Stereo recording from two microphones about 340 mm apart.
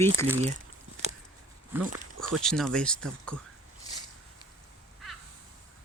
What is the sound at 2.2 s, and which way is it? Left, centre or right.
Speech, centre.